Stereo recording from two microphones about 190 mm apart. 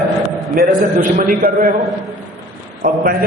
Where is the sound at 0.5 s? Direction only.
45° right (ahead or behind).